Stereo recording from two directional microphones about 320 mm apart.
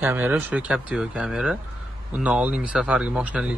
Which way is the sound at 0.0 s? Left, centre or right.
Centre.